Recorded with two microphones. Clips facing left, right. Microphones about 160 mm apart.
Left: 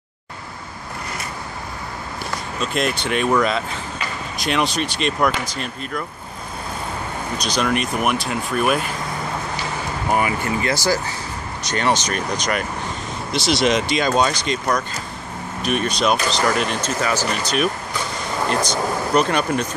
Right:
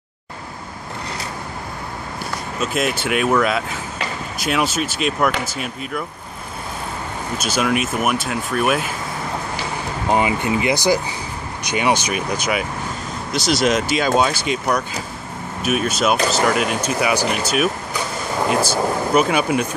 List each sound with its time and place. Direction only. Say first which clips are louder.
2.6 s speech: right 1 dB; 5° right (ahead or behind)
7.3 s speech: right 1 dB; 5° right (ahead or behind)
10.0 s speech: right 3 dB; 20° right (ahead or behind)